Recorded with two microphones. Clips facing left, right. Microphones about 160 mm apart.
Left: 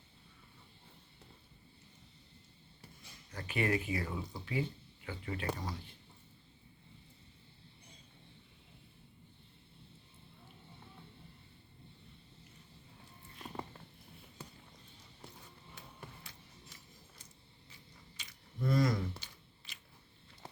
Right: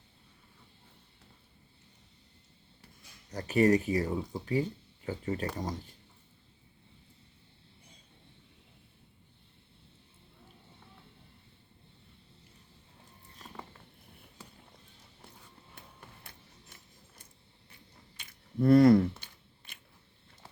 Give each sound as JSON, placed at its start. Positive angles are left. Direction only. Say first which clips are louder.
{"t": 3.3, "sound": "speech", "louder": "right 9 dB", "side_deg": -40}
{"t": 16.3, "sound": "a sound", "louder": "right 2 dB", "side_deg": -55}
{"t": 18.2, "sound": "scissors", "louder": "right 10 dB", "side_deg": -55}